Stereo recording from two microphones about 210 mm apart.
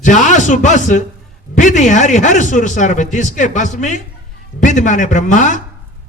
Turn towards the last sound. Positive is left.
turn(degrees=35)  # may be behind; listen again after turning